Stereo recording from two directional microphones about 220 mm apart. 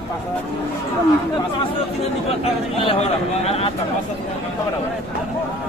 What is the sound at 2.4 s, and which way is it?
Speech, 30° left (ahead or behind).